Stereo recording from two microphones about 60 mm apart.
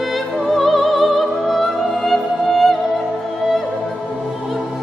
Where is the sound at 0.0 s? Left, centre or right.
Centre.